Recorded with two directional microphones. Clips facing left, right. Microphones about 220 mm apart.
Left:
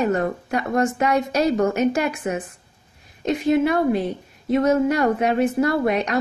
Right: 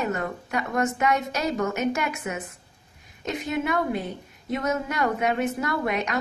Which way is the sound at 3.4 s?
30° left (ahead or behind).